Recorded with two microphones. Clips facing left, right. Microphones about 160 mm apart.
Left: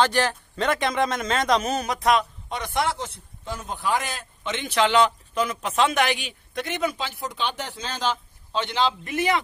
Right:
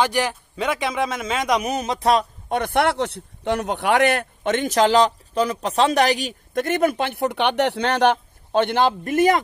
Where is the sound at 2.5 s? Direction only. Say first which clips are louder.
Right 6 dB; 55° right (ahead or behind).